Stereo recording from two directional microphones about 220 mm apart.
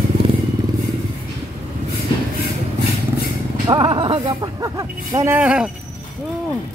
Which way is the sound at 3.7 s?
20° right (ahead or behind).